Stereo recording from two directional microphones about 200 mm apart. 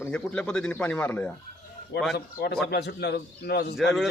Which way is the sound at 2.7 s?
55° left (ahead or behind).